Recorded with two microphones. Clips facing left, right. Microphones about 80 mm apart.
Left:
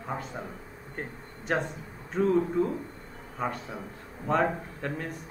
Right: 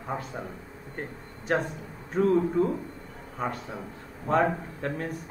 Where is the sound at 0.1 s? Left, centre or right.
Centre.